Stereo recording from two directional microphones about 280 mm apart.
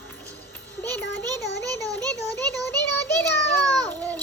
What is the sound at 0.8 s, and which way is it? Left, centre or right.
Speech, centre.